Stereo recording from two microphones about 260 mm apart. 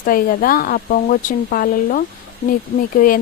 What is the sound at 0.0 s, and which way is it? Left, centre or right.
Speech, left.